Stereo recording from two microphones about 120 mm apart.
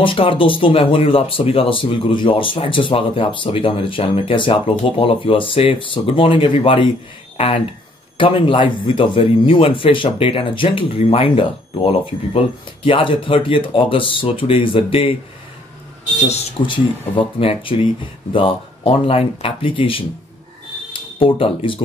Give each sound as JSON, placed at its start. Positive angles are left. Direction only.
{"t": 0.0, "sound": "speech", "side_deg": 50}
{"t": 16.2, "sound": "speech", "side_deg": 65}
{"t": 16.5, "sound": "speech", "side_deg": 45}